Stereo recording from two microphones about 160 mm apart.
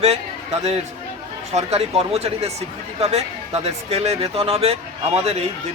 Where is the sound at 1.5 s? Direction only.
40° right (ahead or behind).